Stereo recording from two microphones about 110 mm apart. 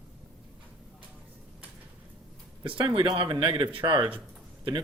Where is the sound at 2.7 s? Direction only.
55° right (ahead or behind).